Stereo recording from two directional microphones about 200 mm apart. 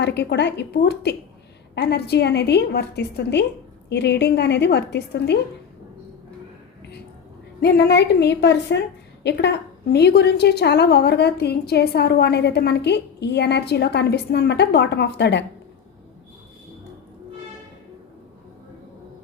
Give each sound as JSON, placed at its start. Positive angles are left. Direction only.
{"t": 0.0, "sound": "a woman's voice", "side_deg": 60}
{"t": 7.6, "sound": "a woman's voice", "side_deg": 55}